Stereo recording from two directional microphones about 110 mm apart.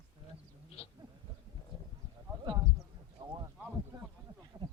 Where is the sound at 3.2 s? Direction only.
30° right (ahead or behind).